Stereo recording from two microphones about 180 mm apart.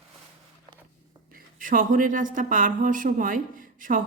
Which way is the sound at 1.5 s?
50° right (ahead or behind).